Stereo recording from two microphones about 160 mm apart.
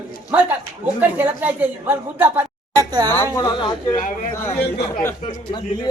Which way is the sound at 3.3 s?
25° left (ahead or behind).